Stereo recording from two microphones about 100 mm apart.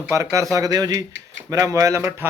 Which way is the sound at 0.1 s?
30° right (ahead or behind).